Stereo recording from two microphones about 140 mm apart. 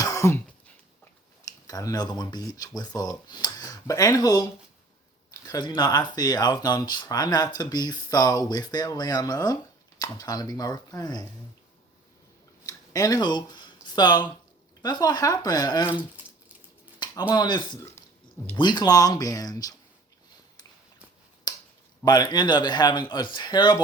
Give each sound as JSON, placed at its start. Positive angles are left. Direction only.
{"t": 0.0, "sound": "throat clearing", "side_deg": 25}
{"t": 1.6, "sound": "speech", "side_deg": 25}
{"t": 12.6, "sound": "speech", "side_deg": 25}
{"t": 17.0, "sound": "a sound", "side_deg": 30}
{"t": 17.3, "sound": "speech", "side_deg": 30}
{"t": 21.5, "sound": "finger snapping", "side_deg": 30}
{"t": 22.0, "sound": "speech", "side_deg": 30}